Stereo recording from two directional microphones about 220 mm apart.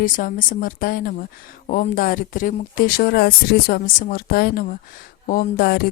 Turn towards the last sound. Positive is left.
turn(degrees=45)  # may be behind; listen again after turning